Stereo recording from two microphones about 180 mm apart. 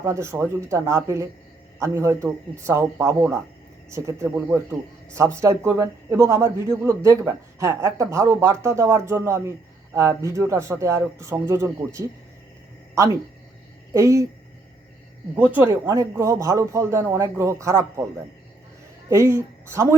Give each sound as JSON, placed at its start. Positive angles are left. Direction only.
{"t": 0.0, "sound": "a man's voice", "side_deg": -15}
{"t": 15.4, "sound": "a man's voice", "side_deg": -10}
{"t": 19.0, "sound": "speech", "side_deg": -15}